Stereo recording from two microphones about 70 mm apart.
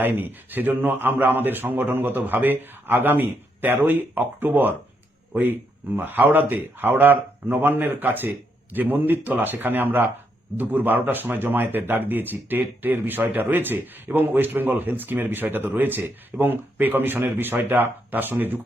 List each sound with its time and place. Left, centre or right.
0.0 s speech: right